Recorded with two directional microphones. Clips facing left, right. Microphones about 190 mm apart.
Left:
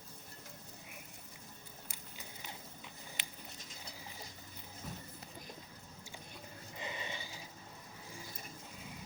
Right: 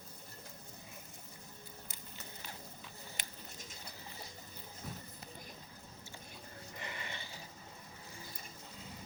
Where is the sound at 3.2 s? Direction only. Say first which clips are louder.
Right 1 dB; 45° right (ahead or behind).